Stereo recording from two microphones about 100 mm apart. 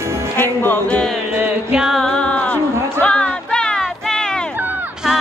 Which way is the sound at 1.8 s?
Centre (ahead or behind).